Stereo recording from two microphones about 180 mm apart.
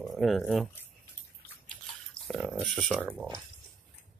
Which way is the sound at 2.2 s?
5° left (ahead or behind).